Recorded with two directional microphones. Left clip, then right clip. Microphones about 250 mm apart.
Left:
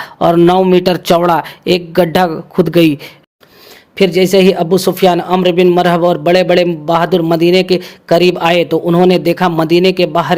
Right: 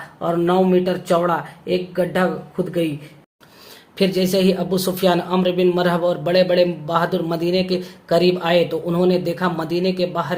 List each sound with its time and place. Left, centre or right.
0.2 s speech: left
3.9 s speech: left